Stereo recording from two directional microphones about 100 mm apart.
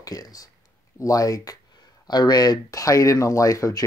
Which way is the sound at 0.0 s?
40° left (ahead or behind).